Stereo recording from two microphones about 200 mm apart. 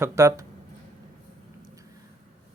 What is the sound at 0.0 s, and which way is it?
Speech, 15° right (ahead or behind).